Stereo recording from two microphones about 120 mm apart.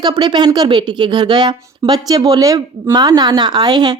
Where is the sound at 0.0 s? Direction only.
40° right (ahead or behind).